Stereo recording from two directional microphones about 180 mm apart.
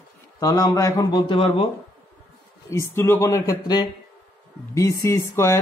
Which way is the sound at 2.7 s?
15° left (ahead or behind).